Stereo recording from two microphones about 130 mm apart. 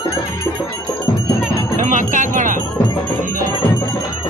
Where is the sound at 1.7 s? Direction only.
70° right (ahead or behind).